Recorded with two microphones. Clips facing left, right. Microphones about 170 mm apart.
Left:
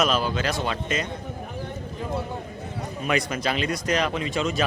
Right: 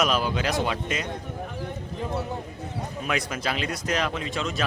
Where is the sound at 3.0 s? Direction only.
5° right (ahead or behind).